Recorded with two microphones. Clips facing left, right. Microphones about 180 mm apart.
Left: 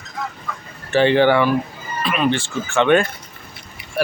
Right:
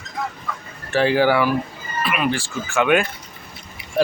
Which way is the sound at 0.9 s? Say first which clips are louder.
Left 3 dB; 5° right (ahead or behind).